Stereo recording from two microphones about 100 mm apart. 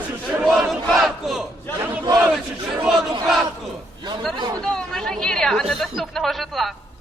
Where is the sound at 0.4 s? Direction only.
Centre (ahead or behind).